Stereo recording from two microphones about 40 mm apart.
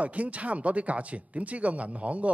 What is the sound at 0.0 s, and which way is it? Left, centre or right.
Speech, right.